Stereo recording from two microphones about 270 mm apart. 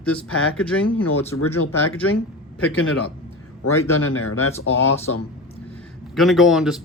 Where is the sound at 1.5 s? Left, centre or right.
Left.